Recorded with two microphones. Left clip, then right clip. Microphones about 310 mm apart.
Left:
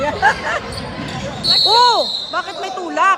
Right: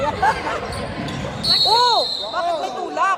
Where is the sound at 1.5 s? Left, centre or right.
Left.